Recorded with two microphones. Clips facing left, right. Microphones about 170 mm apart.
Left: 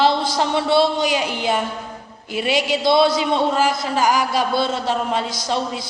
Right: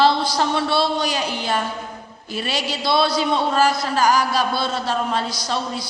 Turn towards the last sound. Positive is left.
turn(degrees=20)  # may be behind; listen again after turning